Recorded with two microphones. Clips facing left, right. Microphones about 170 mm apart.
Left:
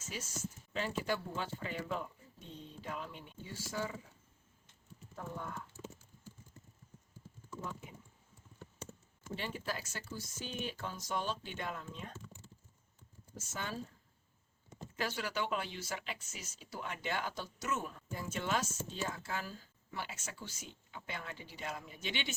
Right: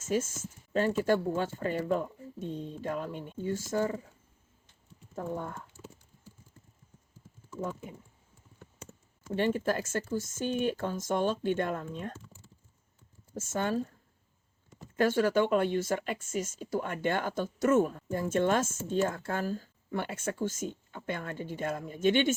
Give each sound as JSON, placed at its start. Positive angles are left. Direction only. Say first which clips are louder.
{"t": 0.0, "sound": "speech", "louder": "right 13 dB", "side_deg": -50}
{"t": 9.3, "sound": "speech", "louder": "right 12 dB", "side_deg": -55}
{"t": 13.3, "sound": "speech", "louder": "right 12 dB", "side_deg": -50}
{"t": 14.9, "sound": "speech", "louder": "right 13 dB", "side_deg": -50}